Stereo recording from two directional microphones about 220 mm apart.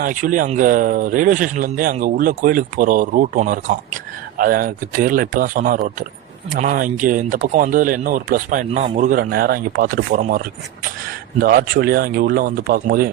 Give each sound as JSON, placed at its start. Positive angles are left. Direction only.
{"t": 0.0, "sound": "speech", "side_deg": -35}